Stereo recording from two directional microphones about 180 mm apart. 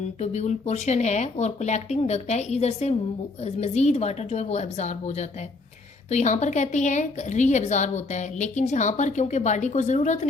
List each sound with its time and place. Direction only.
0.2 s a woman's voice: 40° left (ahead or behind)